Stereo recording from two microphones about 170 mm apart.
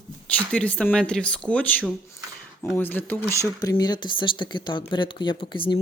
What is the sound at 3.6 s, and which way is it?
Speech, 20° left (ahead or behind).